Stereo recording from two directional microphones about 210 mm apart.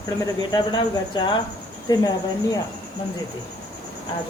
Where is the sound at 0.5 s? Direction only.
20° left (ahead or behind).